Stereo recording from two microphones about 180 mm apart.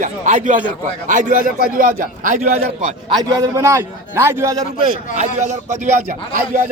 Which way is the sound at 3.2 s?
20° right (ahead or behind).